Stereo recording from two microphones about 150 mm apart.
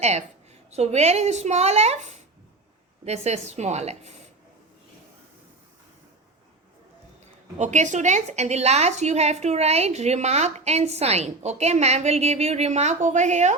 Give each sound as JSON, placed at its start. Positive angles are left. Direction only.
{"t": 0.0, "sound": "a woman's voice", "side_deg": -45}
{"t": 7.6, "sound": "a woman's voice", "side_deg": -55}